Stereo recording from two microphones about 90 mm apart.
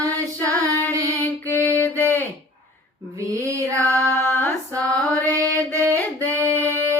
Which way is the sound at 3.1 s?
35° right (ahead or behind).